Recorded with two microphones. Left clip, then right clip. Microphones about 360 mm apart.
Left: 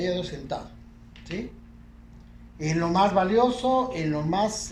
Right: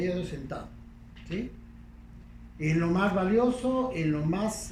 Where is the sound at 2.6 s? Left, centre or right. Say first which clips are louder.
Left 5 dB; left.